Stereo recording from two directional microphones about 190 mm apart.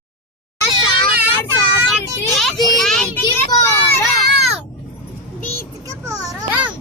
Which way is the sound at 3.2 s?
20° left (ahead or behind).